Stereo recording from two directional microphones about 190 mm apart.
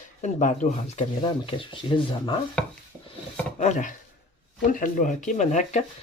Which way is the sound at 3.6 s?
40° left (ahead or behind).